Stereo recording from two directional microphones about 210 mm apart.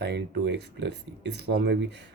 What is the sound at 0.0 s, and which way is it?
Speech, 55° right (ahead or behind).